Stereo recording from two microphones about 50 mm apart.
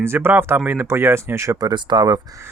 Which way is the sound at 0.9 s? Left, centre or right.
Right.